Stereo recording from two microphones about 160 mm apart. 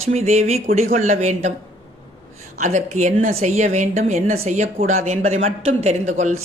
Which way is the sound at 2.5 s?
45° right (ahead or behind).